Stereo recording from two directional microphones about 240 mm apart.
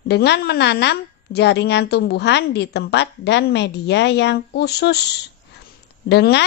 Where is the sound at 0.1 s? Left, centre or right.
Left.